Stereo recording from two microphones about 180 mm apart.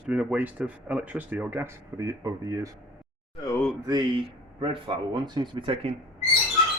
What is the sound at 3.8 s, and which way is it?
Speech, 25° right (ahead or behind).